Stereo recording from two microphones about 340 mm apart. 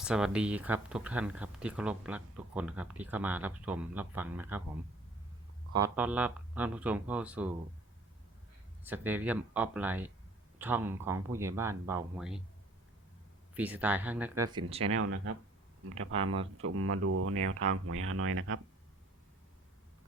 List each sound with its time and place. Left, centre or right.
0.0 s speech: centre
5.7 s speech: centre
8.8 s speech: centre
13.5 s speech: centre
14.8 s speech: right
16.1 s speech: centre
16.6 s speech: right